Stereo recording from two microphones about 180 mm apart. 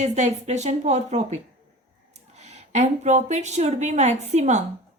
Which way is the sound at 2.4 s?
40° right (ahead or behind).